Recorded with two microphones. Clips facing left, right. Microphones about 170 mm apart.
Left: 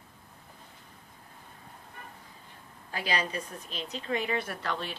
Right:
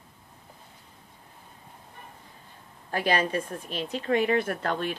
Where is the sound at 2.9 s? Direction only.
50° right (ahead or behind).